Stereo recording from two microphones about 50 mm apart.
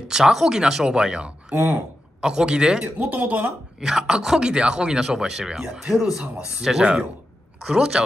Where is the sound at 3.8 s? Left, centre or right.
Centre.